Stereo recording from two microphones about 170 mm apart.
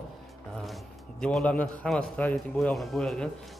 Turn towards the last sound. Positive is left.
turn(degrees=5)  # may be behind; listen again after turning